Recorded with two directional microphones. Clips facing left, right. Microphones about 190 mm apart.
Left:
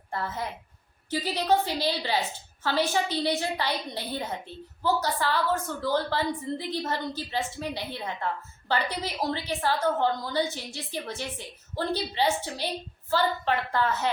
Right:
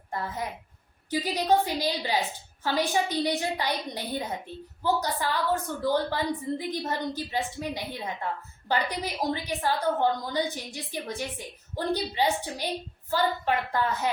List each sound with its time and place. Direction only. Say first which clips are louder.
0.1 s a woman's voice: even; 15° right (ahead or behind)